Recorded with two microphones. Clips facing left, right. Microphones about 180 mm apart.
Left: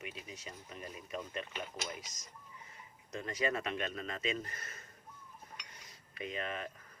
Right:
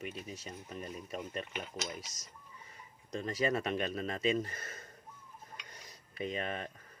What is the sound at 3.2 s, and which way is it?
Speech, 40° right (ahead or behind).